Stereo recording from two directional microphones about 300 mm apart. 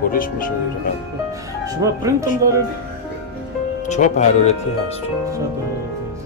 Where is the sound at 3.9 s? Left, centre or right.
Left.